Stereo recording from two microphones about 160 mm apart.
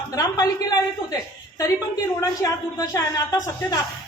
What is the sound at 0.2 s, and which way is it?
Speech, 25° left (ahead or behind).